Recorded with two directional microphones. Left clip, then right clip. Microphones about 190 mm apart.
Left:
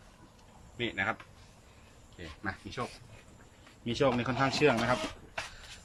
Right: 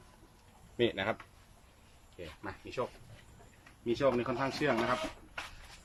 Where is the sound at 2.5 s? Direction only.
10° right (ahead or behind).